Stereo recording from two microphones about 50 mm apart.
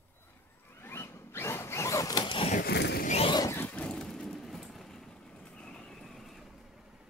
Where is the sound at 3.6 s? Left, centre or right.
Left.